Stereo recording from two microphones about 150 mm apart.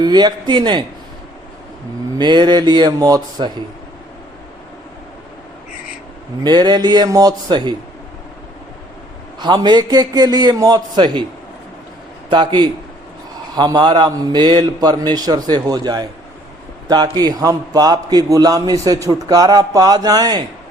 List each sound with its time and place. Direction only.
0.0 s a man's voice: 30° right (ahead or behind)
2.1 s a man's voice: 30° right (ahead or behind)
6.4 s a man's voice: 30° right (ahead or behind)
9.4 s a man's voice: 30° right (ahead or behind)
12.3 s a man's voice: 30° right (ahead or behind)